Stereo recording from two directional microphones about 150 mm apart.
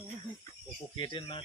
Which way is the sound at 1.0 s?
30° left (ahead or behind).